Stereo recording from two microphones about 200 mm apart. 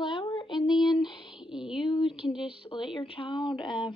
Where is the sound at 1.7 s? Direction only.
25° left (ahead or behind).